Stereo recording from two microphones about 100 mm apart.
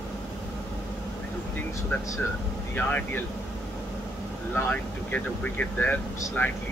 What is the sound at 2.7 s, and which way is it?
Speech, 15° left (ahead or behind).